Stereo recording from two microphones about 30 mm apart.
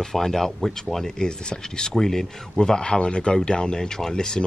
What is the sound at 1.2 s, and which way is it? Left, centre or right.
Speech, left.